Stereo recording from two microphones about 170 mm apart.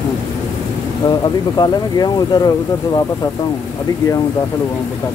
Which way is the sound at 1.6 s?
20° left (ahead or behind).